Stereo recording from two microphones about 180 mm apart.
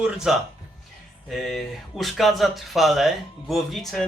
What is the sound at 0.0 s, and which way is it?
Speech, 5° right (ahead or behind).